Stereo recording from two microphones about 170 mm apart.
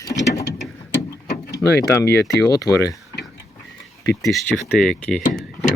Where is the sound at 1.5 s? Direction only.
15° left (ahead or behind).